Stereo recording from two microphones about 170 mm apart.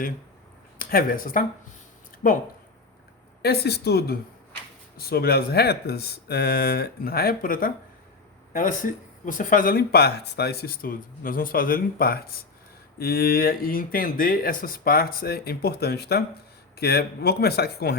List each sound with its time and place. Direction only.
0.8 s speech: 55° left (ahead or behind)
3.4 s speech: 70° left (ahead or behind)